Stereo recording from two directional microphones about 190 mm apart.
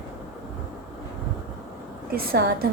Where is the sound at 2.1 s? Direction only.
50° right (ahead or behind).